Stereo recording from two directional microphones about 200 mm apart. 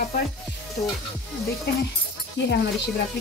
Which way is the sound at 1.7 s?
55° left (ahead or behind).